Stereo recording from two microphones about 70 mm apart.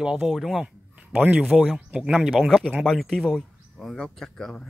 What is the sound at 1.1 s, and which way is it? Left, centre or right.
Speech, right.